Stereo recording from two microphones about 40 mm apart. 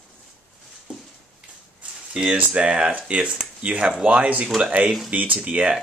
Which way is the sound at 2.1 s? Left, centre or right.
Right.